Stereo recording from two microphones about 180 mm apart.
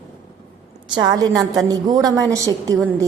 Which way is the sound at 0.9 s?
20° right (ahead or behind).